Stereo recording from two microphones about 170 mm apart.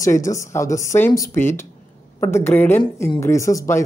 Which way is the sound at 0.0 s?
20° left (ahead or behind).